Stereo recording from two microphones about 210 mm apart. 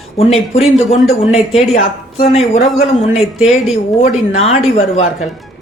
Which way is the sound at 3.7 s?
30° left (ahead or behind).